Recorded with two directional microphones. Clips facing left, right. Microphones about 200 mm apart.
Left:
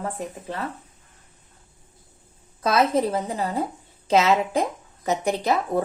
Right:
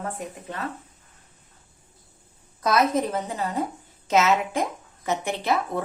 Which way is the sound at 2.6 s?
30° left (ahead or behind).